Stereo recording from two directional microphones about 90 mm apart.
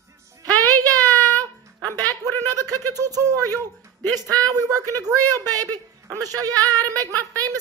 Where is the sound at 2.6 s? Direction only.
45° right (ahead or behind).